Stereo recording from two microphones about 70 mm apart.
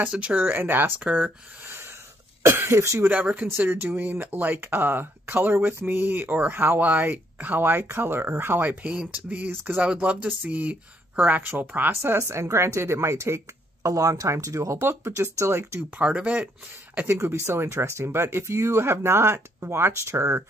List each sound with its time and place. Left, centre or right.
0.1 s speech: centre
1.7 s a sound: right
2.4 s speech: right
3.1 s speech: right
9.8 s speech: centre
12.0 s speech: right
13.8 s speech: right
16.0 s speech: centre
17.1 s speech: right